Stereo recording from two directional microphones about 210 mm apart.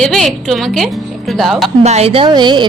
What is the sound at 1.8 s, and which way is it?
Speech, 30° right (ahead or behind).